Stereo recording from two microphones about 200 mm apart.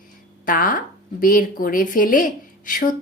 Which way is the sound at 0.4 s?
45° left (ahead or behind).